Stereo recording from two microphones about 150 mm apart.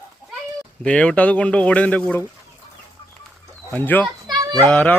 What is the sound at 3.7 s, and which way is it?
Speech, 10° left (ahead or behind).